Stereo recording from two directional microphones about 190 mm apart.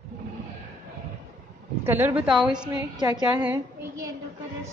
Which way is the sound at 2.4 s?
5° right (ahead or behind).